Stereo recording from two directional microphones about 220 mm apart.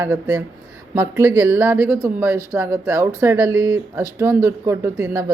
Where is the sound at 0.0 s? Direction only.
10° right (ahead or behind).